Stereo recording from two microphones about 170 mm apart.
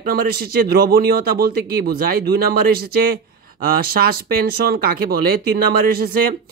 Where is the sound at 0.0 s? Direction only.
60° right (ahead or behind).